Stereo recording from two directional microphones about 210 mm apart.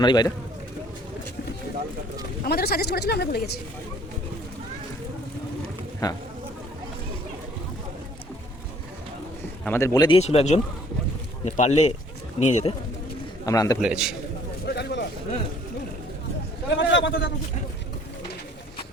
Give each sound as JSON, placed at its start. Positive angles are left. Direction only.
{"t": 0.0, "sound": "speech", "side_deg": 20}
{"t": 2.4, "sound": "speech", "side_deg": 50}
{"t": 6.0, "sound": "speech", "side_deg": 20}
{"t": 9.6, "sound": "a man's voice", "side_deg": 10}
{"t": 10.2, "sound": "speech", "side_deg": 30}
{"t": 13.4, "sound": "a man's voice", "side_deg": 15}
{"t": 13.8, "sound": "a man's voice", "side_deg": -5}
{"t": 14.7, "sound": "a sound", "side_deg": 50}
{"t": 16.7, "sound": "a man's voice", "side_deg": 60}